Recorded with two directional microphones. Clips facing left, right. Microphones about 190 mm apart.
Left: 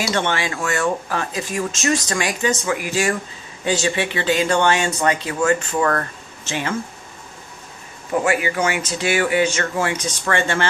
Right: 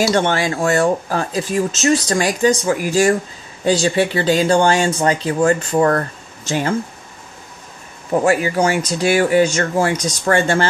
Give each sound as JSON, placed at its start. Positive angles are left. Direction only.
{"t": 0.1, "sound": "speech", "side_deg": -40}
{"t": 8.2, "sound": "speech", "side_deg": -40}